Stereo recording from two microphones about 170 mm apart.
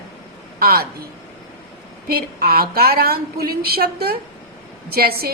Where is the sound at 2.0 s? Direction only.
60° right (ahead or behind).